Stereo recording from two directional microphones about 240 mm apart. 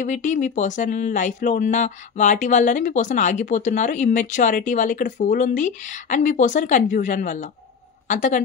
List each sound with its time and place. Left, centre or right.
0.0 s speech: left